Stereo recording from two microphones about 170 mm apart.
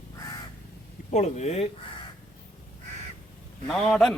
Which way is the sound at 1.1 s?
40° left (ahead or behind).